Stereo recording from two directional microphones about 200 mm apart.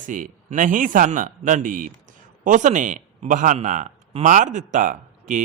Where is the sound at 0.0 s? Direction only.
40° right (ahead or behind).